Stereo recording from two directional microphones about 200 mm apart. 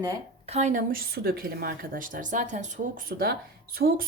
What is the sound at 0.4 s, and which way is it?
A woman's voice, 35° right (ahead or behind).